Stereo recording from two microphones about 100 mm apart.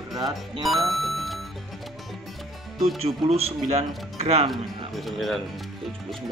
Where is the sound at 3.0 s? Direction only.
90° right.